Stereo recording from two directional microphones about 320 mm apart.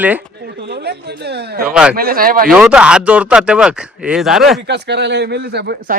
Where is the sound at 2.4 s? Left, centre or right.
Centre.